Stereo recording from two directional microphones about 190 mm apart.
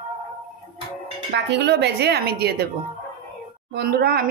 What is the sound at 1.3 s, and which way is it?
A woman's voice, 65° right (ahead or behind).